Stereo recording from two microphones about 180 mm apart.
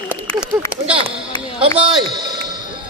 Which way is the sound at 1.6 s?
30° right (ahead or behind).